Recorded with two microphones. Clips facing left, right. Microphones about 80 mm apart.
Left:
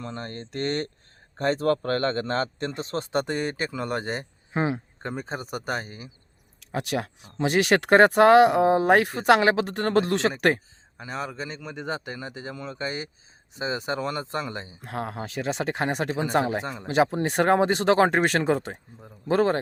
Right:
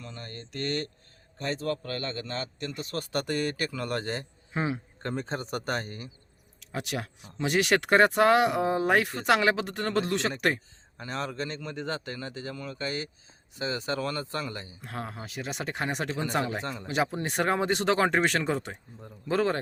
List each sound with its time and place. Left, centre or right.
0.0 s a man's voice: left
1.4 s a man's voice: left
5.0 s speech: centre
6.7 s a man's voice: left
10.9 s speech: centre; by 15.9 s left
16.0 s speech: centre
16.8 s a man's voice: left